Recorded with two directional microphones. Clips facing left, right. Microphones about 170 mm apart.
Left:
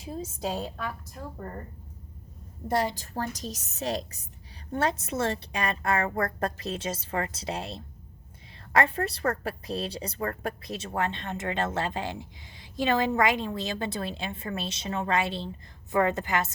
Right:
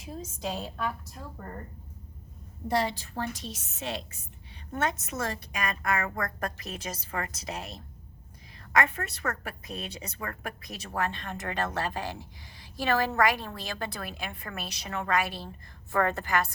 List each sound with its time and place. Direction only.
0.1 s a woman's voice: 35° left (ahead or behind)
2.6 s a woman's voice: 45° left (ahead or behind); by 16.5 s 20° left (ahead or behind)